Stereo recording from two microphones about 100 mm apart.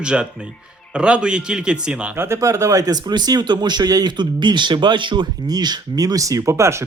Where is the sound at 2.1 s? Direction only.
25° right (ahead or behind).